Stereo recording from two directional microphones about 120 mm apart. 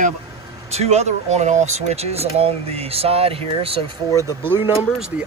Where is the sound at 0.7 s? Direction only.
65° right (ahead or behind).